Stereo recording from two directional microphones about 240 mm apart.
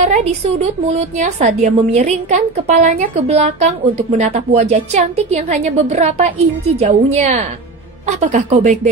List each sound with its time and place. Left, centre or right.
0.0 s a woman's voice: right